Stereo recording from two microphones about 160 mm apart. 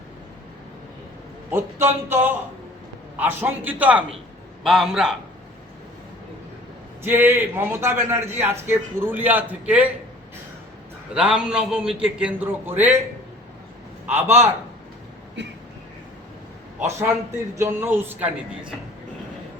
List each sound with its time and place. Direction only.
1.5 s a man's voice: 15° right (ahead or behind)
7.0 s a man's voice: 15° right (ahead or behind)
11.1 s a man's voice: 5° right (ahead or behind)
14.1 s a man's voice: 15° right (ahead or behind)
15.4 s a sound: 90° right
16.8 s a man's voice: 15° right (ahead or behind)